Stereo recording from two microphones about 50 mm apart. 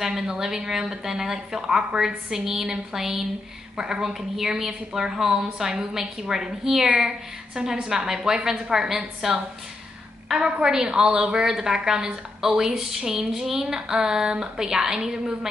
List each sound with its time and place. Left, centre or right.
0.0 s a woman's voice: centre
8.8 s a woman's voice: centre
10.6 s a woman's voice: centre